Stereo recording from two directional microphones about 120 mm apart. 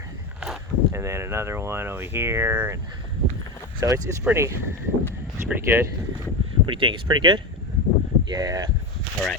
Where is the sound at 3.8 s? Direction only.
25° right (ahead or behind).